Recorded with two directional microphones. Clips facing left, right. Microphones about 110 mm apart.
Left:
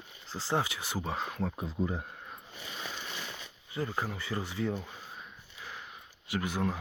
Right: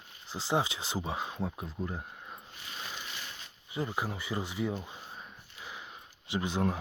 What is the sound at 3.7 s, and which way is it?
Speech, 15° right (ahead or behind).